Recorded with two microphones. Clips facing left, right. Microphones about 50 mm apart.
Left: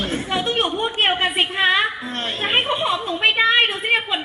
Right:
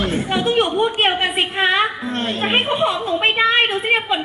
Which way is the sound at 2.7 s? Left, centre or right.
Right.